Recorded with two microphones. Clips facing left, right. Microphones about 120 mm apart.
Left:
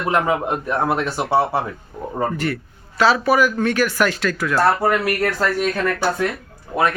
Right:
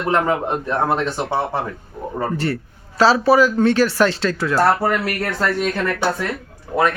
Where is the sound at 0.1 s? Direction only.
10° left (ahead or behind).